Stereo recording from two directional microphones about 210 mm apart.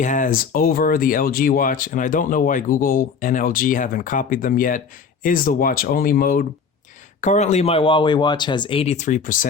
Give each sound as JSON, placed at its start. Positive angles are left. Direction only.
{"t": 0.0, "sound": "speech", "side_deg": 40}